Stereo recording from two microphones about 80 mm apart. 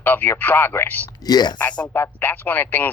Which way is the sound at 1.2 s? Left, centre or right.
Left.